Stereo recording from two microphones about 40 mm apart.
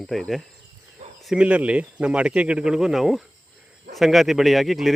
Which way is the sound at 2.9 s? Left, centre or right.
Centre.